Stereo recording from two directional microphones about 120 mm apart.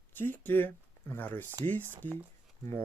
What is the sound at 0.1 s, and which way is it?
Speech, 15° left (ahead or behind).